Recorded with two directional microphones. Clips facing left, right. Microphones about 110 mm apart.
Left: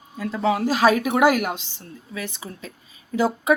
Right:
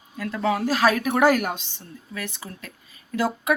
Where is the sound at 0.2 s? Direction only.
15° left (ahead or behind).